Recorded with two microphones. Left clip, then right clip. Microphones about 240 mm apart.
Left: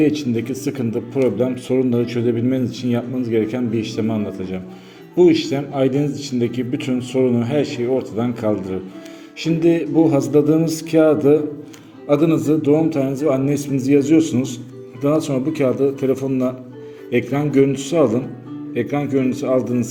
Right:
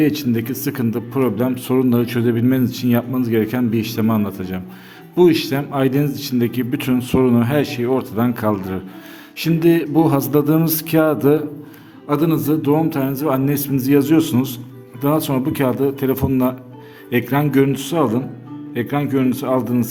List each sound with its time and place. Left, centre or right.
0.1 s a man's voice: right
2.2 s a man's voice: right
2.6 s a man's voice: right